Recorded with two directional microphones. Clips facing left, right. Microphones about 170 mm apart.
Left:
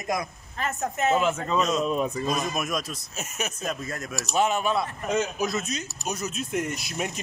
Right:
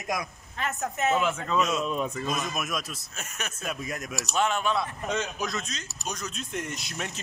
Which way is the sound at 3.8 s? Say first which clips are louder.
Left 1 dB; 15° right (ahead or behind).